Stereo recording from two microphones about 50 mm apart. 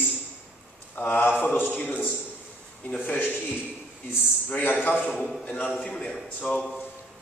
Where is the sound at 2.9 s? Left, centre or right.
Left.